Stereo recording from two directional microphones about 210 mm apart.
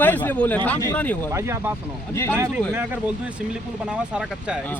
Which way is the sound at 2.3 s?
10° right (ahead or behind).